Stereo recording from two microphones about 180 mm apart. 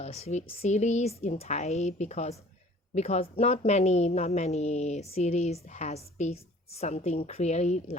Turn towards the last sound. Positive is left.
turn(degrees=40)  # may be behind; listen again after turning